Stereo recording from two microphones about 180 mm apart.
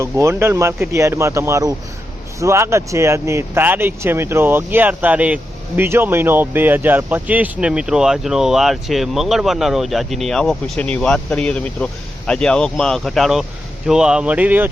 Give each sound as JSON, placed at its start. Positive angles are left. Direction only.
{"t": 0.0, "sound": "speech", "side_deg": -15}